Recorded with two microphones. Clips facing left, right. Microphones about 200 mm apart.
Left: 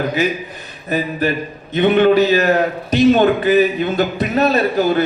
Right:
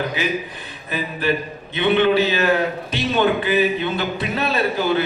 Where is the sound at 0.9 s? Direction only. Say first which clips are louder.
Left 4 dB; 40° left (ahead or behind).